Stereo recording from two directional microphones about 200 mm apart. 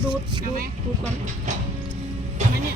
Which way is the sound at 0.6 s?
35° right (ahead or behind).